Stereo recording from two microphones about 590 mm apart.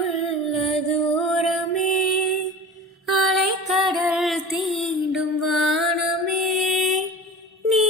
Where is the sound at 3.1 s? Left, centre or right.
Centre.